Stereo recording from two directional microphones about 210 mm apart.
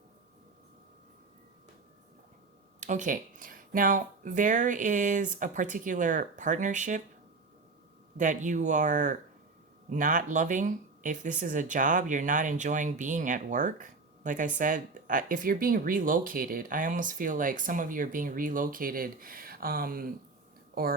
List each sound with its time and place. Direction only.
2.8 s speech: 35° right (ahead or behind)
8.2 s speech: 35° right (ahead or behind)